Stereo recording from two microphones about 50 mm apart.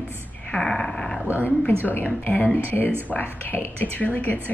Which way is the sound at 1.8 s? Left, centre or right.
Left.